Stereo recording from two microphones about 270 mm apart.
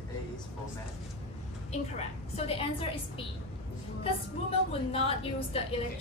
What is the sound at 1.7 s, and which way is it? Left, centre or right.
A woman's voice, left.